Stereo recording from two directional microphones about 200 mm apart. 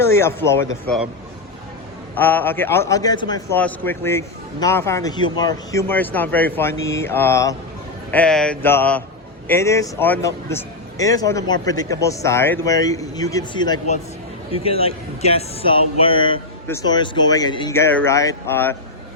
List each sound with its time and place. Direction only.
0.0 s a man's voice: 10° left (ahead or behind)
2.1 s a man's voice: 10° left (ahead or behind)
5.9 s a man's voice: 10° left (ahead or behind)